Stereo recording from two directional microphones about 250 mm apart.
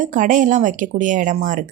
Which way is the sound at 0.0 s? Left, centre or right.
Right.